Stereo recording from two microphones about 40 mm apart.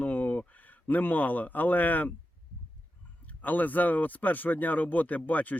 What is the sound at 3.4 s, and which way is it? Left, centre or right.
Speech, left.